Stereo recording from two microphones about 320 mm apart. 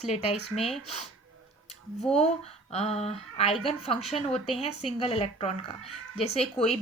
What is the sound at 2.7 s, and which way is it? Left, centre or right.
Speech, centre.